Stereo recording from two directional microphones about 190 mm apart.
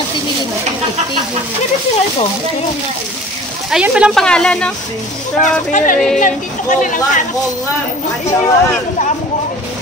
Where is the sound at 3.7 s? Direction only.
5° right (ahead or behind).